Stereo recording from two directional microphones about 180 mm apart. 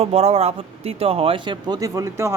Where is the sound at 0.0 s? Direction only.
35° right (ahead or behind).